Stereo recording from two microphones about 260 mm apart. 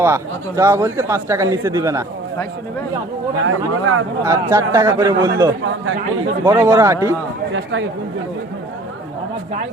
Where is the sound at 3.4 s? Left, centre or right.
Right.